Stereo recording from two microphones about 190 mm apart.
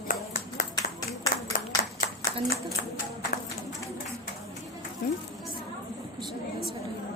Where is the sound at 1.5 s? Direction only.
50° left (ahead or behind).